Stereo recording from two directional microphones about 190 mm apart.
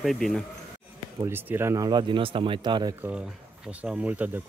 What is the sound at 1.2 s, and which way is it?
Speech, 10° right (ahead or behind).